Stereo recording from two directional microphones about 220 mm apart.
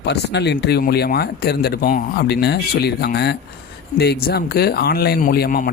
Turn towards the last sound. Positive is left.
turn(degrees=40)  # may be behind; listen again after turning